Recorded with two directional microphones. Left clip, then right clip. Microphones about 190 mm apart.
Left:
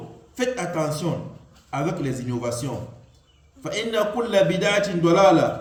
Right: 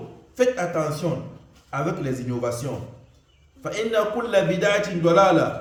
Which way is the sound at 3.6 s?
10° right (ahead or behind).